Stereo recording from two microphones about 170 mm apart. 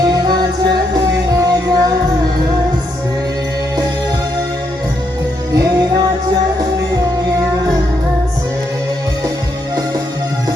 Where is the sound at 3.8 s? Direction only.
25° right (ahead or behind).